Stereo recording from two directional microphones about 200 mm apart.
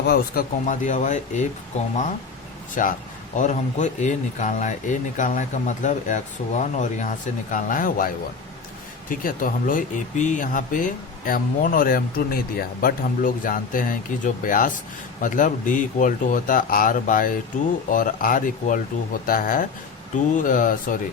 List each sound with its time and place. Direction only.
0.1 s speech: 45° left (ahead or behind)
2.8 s speech: 40° left (ahead or behind)